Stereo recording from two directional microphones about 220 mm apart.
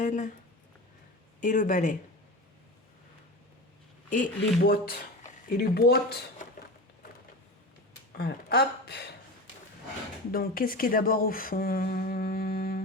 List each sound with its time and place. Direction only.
0.0 s speech: 35° left (ahead or behind)
1.4 s speech: 35° left (ahead or behind)
4.1 s speech: 40° left (ahead or behind)
8.1 s speech: 45° left (ahead or behind)
10.3 s speech: 40° left (ahead or behind)